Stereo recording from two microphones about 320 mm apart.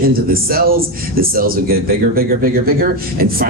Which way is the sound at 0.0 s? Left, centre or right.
Right.